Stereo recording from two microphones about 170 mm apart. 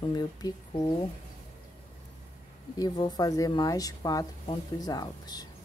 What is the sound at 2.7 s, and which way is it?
Speech, 25° left (ahead or behind).